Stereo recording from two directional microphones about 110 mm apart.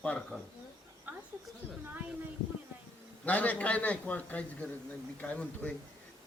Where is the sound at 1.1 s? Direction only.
15° right (ahead or behind).